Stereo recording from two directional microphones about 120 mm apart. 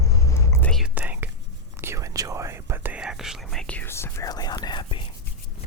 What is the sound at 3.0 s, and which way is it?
Whispering, 5° right (ahead or behind).